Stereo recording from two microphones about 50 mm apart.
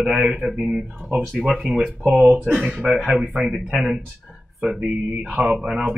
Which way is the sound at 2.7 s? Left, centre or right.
Centre.